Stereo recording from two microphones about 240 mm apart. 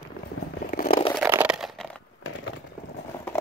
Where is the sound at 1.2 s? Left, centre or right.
Centre.